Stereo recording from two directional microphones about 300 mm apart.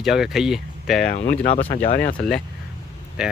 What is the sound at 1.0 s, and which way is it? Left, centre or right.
Speech, left.